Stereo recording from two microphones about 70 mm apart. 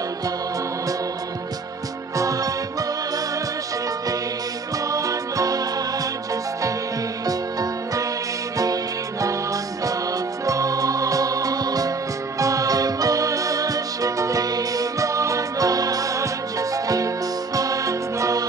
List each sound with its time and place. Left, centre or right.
2.1 s music: right
4.8 s music: right
9.2 s music: right